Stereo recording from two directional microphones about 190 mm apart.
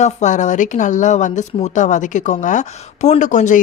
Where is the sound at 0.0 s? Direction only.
40° left (ahead or behind).